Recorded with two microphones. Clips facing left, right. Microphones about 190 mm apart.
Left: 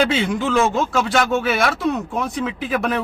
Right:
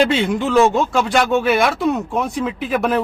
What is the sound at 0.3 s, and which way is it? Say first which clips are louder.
Speech: right 5 dB; 35° right (ahead or behind).